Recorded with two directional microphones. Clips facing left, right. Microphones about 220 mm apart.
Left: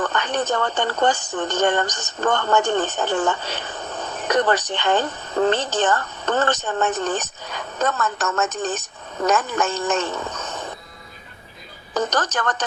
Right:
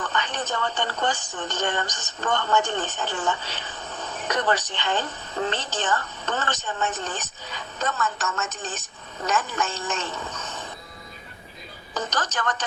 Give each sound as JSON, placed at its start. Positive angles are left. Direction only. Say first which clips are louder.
{"t": 0.0, "sound": "a woman's voice", "louder": "left 6 dB", "side_deg": 55}
{"t": 11.9, "sound": "a woman's voice", "louder": "left 6 dB", "side_deg": 55}